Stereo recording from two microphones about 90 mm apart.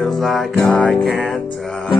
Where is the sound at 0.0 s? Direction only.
Centre (ahead or behind).